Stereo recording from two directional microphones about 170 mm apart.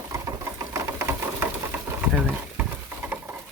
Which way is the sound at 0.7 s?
15° right (ahead or behind).